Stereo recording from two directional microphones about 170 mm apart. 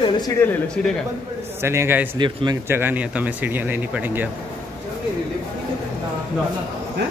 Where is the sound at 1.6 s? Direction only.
15° right (ahead or behind).